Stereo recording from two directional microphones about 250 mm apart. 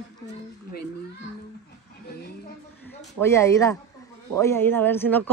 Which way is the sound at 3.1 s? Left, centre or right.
Centre.